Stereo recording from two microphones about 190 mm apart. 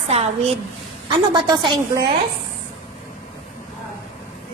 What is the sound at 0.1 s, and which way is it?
Speech, 35° right (ahead or behind).